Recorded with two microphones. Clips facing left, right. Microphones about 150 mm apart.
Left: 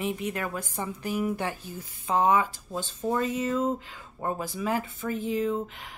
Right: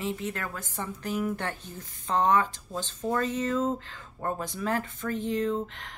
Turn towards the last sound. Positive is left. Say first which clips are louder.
# even
turn(degrees=5)  # may be behind; listen again after turning